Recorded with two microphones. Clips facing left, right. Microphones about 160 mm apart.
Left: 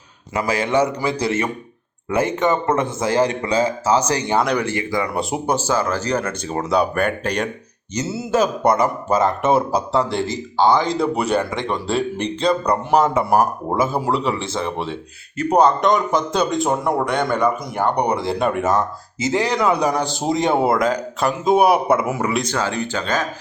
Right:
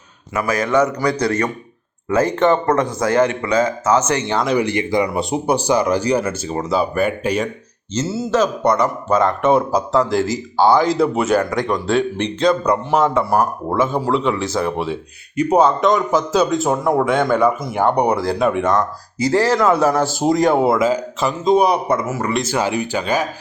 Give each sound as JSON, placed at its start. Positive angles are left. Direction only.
{"t": 0.3, "sound": "a man's voice", "side_deg": 30}
{"t": 2.5, "sound": "a man's voice", "side_deg": 10}
{"t": 2.8, "sound": "speech", "side_deg": 25}
{"t": 4.6, "sound": "speech", "side_deg": -20}
{"t": 6.5, "sound": "speech", "side_deg": 0}
{"t": 7.9, "sound": "a man's voice", "side_deg": 15}
{"t": 11.3, "sound": "a man's voice", "side_deg": 25}
{"t": 11.9, "sound": "speech", "side_deg": 0}
{"t": 13.3, "sound": "a man's voice", "side_deg": 10}
{"t": 19.2, "sound": "a man's voice", "side_deg": 20}
{"t": 20.5, "sound": "speech", "side_deg": 0}
{"t": 22.3, "sound": "speech", "side_deg": 0}
{"t": 22.5, "sound": "speech", "side_deg": -10}